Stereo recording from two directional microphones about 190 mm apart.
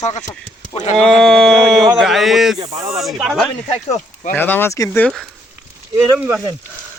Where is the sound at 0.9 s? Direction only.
5° left (ahead or behind).